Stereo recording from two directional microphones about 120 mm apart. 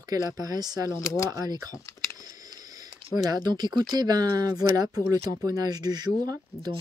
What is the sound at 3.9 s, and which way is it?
Speech, 35° right (ahead or behind).